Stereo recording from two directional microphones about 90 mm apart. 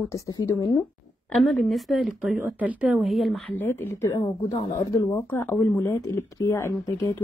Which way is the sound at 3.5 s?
25° left (ahead or behind).